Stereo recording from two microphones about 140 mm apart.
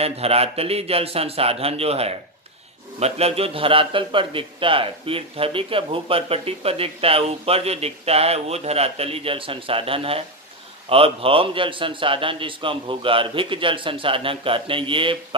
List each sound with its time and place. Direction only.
0.0 s a man's voice: 45° right (ahead or behind)